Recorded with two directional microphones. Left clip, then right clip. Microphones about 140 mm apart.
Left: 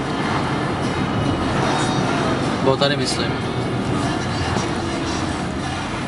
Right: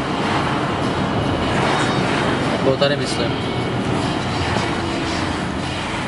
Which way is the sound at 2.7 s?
20° left (ahead or behind).